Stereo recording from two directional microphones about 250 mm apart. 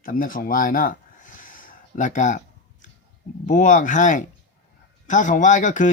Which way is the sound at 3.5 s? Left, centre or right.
Left.